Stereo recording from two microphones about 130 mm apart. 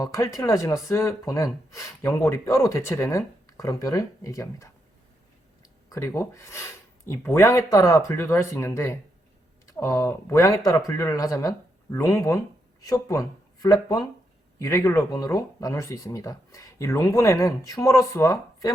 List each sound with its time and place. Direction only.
0.0 s speech: 25° left (ahead or behind)
5.9 s speech: 20° left (ahead or behind)